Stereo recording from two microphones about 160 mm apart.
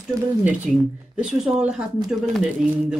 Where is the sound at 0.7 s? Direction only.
Centre (ahead or behind).